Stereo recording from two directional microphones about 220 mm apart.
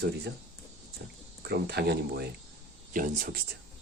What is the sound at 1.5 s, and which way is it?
Speech, 50° right (ahead or behind).